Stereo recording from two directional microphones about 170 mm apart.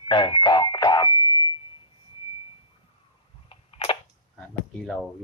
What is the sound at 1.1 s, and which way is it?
Alarm, 20° right (ahead or behind).